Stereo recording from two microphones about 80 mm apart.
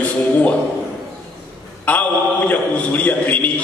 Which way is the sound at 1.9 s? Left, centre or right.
Centre.